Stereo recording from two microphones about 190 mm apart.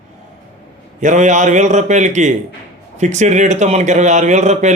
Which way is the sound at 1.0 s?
40° right (ahead or behind).